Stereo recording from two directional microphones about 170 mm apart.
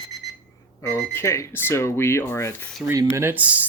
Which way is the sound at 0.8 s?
15° left (ahead or behind).